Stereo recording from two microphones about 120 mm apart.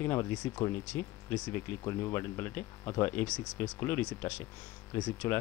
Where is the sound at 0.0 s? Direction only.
20° left (ahead or behind).